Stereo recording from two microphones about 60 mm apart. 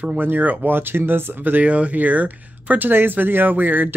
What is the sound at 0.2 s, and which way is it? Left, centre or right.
Speech, right.